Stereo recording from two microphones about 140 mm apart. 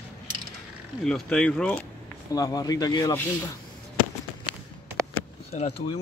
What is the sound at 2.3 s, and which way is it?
Speech, 25° left (ahead or behind).